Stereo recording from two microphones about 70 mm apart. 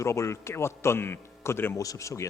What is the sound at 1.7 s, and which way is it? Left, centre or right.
Speech, left.